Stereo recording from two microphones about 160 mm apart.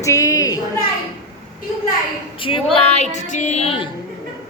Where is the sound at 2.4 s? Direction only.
35° left (ahead or behind).